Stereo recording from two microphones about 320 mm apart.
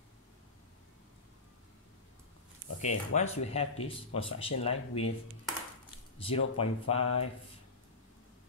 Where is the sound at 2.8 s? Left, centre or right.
Left.